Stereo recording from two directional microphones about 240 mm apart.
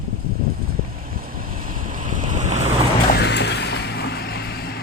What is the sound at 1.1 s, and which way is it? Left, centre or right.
Waves, right.